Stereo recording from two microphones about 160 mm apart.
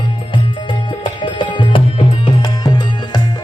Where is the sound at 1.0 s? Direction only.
30° left (ahead or behind).